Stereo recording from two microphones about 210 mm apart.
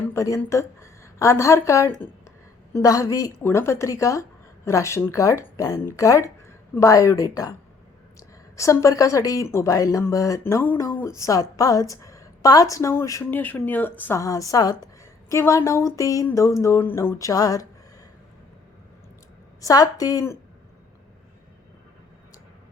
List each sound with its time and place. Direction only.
0.1 s a woman's voice: 15° left (ahead or behind)
8.5 s speech: 15° left (ahead or behind)
19.6 s speech: 15° left (ahead or behind)